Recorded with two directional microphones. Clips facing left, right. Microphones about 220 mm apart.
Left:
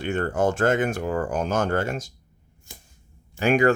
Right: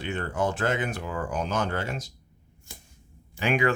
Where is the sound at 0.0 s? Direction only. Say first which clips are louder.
Left 5 dB; 45° left (ahead or behind).